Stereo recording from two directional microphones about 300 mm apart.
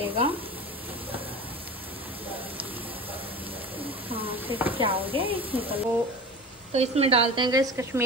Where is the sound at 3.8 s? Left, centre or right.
Centre.